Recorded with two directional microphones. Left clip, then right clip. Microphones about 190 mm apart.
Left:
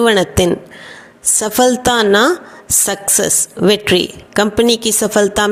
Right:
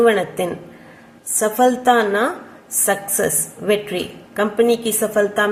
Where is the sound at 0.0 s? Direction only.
50° left (ahead or behind).